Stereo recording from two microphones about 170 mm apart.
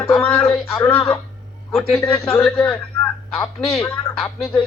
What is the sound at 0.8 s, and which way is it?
Speech, 15° left (ahead or behind).